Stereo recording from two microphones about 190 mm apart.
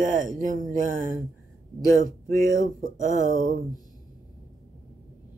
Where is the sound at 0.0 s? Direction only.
45° right (ahead or behind).